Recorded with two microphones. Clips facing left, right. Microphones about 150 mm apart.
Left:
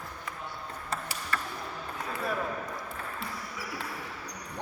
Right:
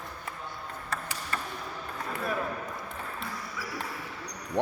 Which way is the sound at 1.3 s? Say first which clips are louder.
Left 1 dB; 25° right (ahead or behind).